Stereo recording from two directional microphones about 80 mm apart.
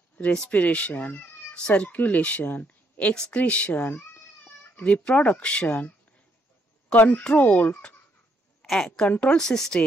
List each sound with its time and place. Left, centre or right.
0.2 s speech: centre
9.0 s speech: centre